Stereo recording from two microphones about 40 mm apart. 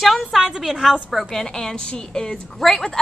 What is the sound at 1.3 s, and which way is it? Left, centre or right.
A woman's voice, centre.